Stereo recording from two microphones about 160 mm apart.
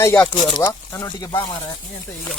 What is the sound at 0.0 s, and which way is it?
Speech, 15° left (ahead or behind).